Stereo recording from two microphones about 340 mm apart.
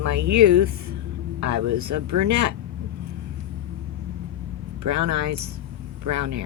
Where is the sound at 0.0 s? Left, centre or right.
Right.